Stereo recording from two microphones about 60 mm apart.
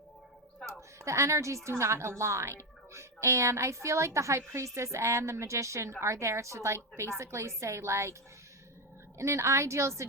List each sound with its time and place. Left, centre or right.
0.6 s a sound: right
1.8 s a woman's voice: right
9.1 s a woman's voice: right